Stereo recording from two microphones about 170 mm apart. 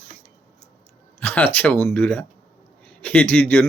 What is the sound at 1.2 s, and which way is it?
Speech, 10° left (ahead or behind).